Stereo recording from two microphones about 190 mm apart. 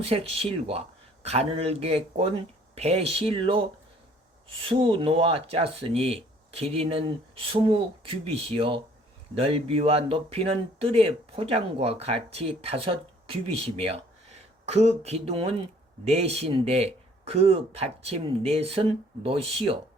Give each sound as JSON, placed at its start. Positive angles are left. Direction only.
{"t": 0.0, "sound": "speech", "side_deg": -30}